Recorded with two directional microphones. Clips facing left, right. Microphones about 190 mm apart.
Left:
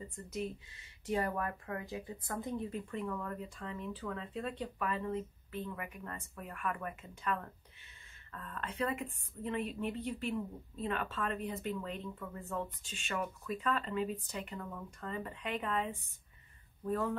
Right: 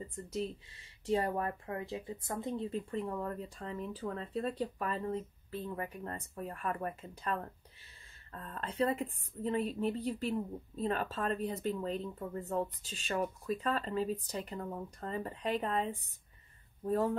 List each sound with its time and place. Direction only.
0.1 s a woman's voice: 35° right (ahead or behind)